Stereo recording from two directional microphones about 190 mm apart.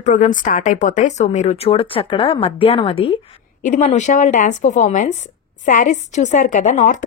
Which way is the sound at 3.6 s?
40° left (ahead or behind).